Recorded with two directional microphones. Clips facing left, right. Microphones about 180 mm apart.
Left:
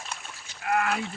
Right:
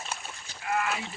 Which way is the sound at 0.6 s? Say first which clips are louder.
Left 3 dB; 55° left (ahead or behind).